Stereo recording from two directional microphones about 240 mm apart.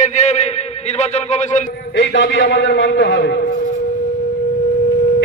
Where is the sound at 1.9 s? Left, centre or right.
Left.